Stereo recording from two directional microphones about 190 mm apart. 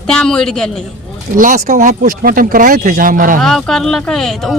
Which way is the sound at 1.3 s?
45° right (ahead or behind).